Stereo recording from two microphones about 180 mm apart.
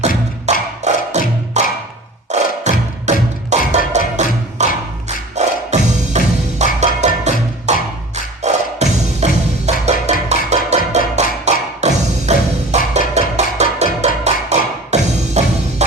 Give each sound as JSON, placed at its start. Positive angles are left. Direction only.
{"t": 0.4, "sound": "music", "side_deg": -40}